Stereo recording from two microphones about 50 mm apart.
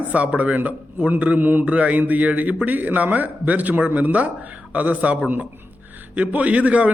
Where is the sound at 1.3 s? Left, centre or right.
Right.